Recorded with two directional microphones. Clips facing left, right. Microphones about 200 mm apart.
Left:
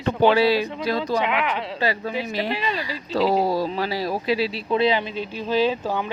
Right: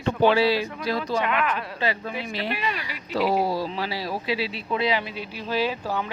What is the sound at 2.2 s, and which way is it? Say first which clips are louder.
Speech: left 3 dB; 25° left (ahead or behind).